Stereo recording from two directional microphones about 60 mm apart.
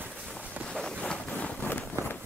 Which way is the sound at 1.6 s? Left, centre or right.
Left.